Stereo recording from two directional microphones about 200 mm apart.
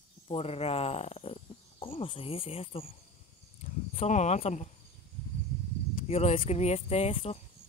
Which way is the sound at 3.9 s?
35° left (ahead or behind).